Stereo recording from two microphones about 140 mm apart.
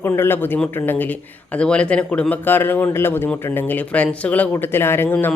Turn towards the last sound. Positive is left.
turn(degrees=15)  # may be behind; listen again after turning